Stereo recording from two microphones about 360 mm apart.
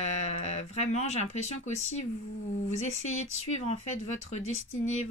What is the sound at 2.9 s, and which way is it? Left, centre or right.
Speech, left.